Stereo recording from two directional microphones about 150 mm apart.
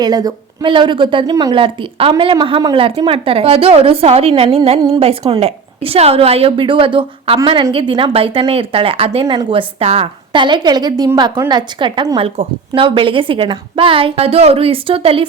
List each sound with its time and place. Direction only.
0.0 s a woman's voice: 25° right (ahead or behind)
9.2 s a woman's voice: 25° right (ahead or behind)